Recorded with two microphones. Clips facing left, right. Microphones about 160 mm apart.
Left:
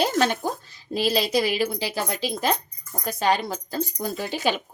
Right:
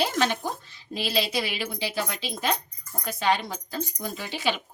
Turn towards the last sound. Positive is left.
turn(degrees=45)  # may be behind; listen again after turning